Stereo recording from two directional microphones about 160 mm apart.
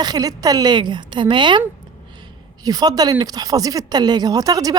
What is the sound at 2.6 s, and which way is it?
Speech, 25° right (ahead or behind).